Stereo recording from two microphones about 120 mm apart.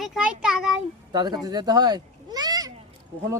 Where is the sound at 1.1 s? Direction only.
35° right (ahead or behind).